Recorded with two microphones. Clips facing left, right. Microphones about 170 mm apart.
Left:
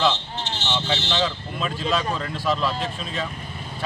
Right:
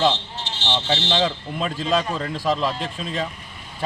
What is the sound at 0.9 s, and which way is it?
Speech, 35° right (ahead or behind).